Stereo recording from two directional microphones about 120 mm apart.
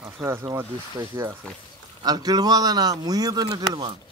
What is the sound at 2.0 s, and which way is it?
A man's voice, 35° right (ahead or behind).